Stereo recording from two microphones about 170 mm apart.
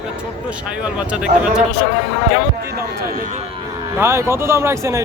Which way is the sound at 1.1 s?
5° right (ahead or behind).